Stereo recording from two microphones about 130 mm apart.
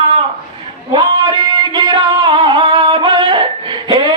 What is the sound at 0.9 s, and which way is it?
Music, 35° right (ahead or behind).